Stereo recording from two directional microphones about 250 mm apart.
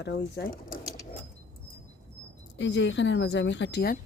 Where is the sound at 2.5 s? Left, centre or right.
Left.